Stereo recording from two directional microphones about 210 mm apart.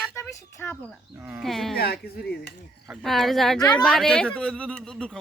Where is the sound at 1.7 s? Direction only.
50° left (ahead or behind).